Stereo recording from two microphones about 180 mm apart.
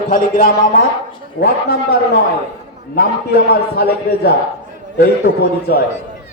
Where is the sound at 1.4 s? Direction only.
60° left (ahead or behind).